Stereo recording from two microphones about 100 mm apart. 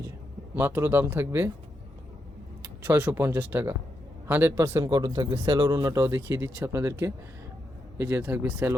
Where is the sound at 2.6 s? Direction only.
20° right (ahead or behind).